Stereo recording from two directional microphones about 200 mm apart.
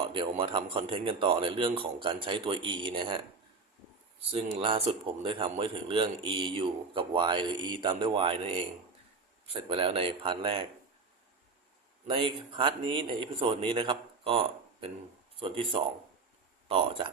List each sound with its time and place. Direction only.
0.1 s speech: 25° right (ahead or behind)
4.2 s speech: 30° right (ahead or behind)
12.0 s speech: 25° right (ahead or behind)